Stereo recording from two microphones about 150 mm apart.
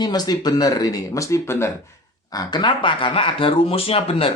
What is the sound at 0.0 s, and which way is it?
Speech, 25° left (ahead or behind).